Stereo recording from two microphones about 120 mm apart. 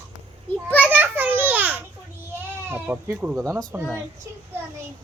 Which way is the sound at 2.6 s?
20° right (ahead or behind).